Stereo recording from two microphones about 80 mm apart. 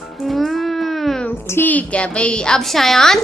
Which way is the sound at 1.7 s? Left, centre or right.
Centre.